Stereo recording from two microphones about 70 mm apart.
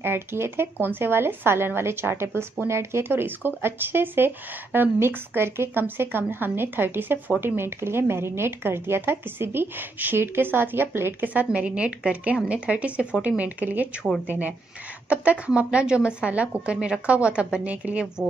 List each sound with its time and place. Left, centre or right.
0.0 s speech: right
11.2 s speech: right